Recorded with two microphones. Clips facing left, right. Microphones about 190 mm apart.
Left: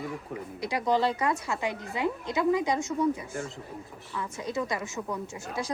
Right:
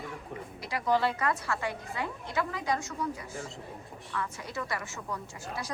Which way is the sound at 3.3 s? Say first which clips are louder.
Left 5 dB; centre (ahead or behind).